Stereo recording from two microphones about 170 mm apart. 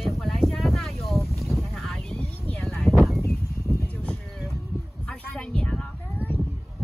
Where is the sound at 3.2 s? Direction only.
15° left (ahead or behind).